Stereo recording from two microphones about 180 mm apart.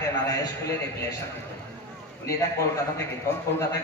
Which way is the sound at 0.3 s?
20° left (ahead or behind).